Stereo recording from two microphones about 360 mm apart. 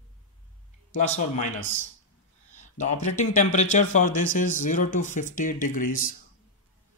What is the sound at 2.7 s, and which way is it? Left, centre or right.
Speech, centre.